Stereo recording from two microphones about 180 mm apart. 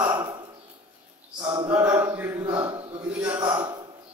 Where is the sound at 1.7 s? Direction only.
10° right (ahead or behind).